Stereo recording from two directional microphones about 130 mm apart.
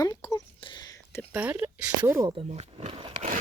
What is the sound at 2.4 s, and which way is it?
Speech, 55° right (ahead or behind).